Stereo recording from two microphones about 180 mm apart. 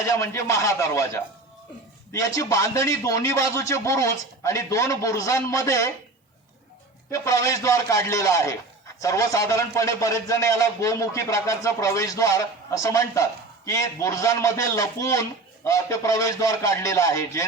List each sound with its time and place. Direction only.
0.0 s speech: 15° left (ahead or behind)
7.1 s speech: 15° left (ahead or behind)